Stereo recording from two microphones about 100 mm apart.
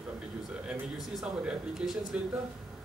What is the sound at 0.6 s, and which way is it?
Speech, 5° right (ahead or behind).